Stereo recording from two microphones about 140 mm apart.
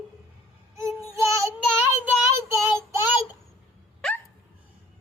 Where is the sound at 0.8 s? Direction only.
20° right (ahead or behind).